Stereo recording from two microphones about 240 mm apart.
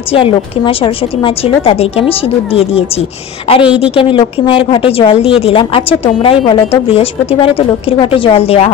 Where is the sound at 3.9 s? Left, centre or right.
Left.